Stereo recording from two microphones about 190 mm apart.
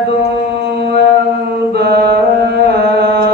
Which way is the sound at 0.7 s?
60° right (ahead or behind).